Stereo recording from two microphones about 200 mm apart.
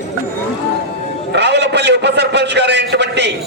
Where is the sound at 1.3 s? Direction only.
60° right (ahead or behind).